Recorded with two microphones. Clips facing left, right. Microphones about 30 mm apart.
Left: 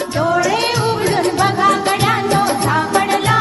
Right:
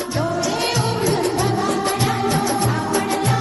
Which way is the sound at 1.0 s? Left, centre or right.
Left.